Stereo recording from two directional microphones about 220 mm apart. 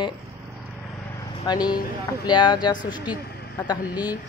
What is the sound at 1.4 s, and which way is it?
Speech, 20° left (ahead or behind).